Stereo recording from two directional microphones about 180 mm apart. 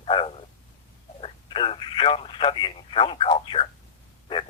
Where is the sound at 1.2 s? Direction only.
30° left (ahead or behind).